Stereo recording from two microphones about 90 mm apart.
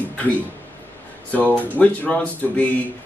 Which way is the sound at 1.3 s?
15° left (ahead or behind).